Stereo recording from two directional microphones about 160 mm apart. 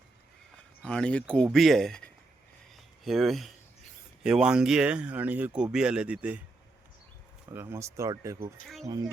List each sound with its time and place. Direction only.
0.8 s speech: 5° left (ahead or behind)
7.5 s speech: 15° right (ahead or behind)
8.6 s speech: centre (ahead or behind)